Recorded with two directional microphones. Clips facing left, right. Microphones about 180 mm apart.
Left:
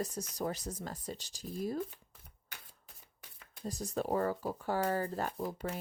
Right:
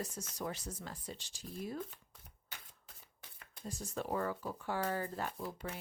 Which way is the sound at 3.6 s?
35° left (ahead or behind).